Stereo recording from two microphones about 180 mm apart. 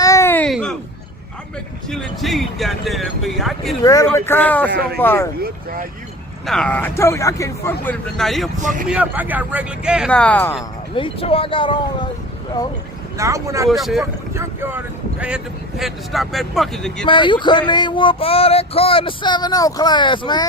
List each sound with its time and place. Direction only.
0.0 s a sound: 15° left (ahead or behind)
1.9 s speech: centre (ahead or behind)
3.8 s speech: 15° left (ahead or behind)
4.7 s speech: 60° right (ahead or behind)
4.9 s speech: 10° left (ahead or behind)
6.4 s speech: centre (ahead or behind)
8.1 s speech: centre (ahead or behind)
10.1 s speech: 5° left (ahead or behind)
10.9 s a sound: 30° left (ahead or behind)
13.1 s speech: 15° right (ahead or behind)
13.7 s speech: centre (ahead or behind)
15.8 s speech: centre (ahead or behind)
17.1 s a sound: 25° left (ahead or behind)